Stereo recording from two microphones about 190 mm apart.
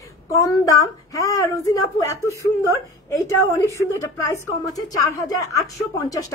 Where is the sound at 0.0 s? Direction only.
15° left (ahead or behind).